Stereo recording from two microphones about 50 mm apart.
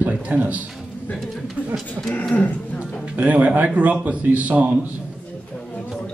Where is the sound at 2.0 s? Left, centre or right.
Right.